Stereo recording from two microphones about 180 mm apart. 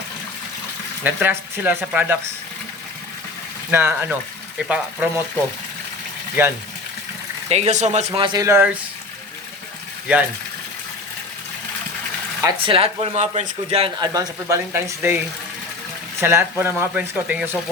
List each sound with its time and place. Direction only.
1.0 s speech: 10° right (ahead or behind)
3.7 s speech: 10° right (ahead or behind)
7.5 s speech: 40° right (ahead or behind); by 8.8 s 10° right (ahead or behind)
12.5 s speech: 30° right (ahead or behind)
14.1 s speech: 15° right (ahead or behind)
16.2 s speech: 15° right (ahead or behind)